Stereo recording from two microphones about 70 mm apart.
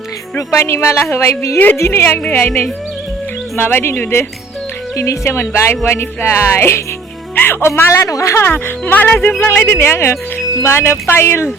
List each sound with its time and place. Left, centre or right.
0.3 s speech: left
3.5 s speech: left
4.9 s speech: left
7.3 s music: left
7.8 s speech: left
8.4 s speech: left